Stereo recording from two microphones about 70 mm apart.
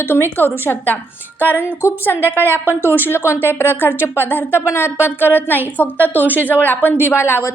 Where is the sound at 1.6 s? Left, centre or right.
Left.